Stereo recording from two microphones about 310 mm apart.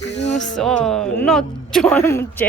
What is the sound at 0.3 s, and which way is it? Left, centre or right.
Speech, left.